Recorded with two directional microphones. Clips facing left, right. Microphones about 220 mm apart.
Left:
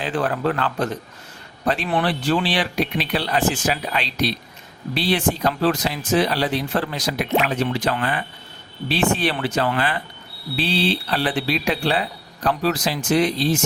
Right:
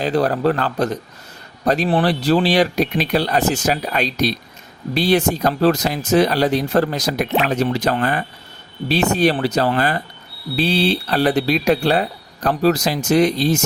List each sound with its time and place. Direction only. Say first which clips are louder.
0.0 s speech: right 5 dB; 40° right (ahead or behind)